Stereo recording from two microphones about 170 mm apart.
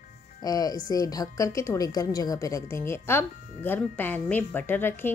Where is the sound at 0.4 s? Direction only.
20° left (ahead or behind).